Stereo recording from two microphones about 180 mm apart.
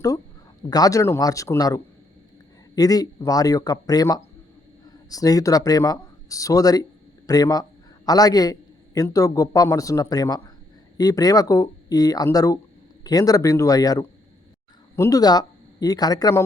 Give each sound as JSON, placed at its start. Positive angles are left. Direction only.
{"t": 0.7, "sound": "a man's voice", "side_deg": 20}